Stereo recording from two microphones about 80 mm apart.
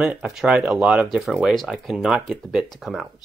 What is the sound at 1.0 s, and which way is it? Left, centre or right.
Speech, centre.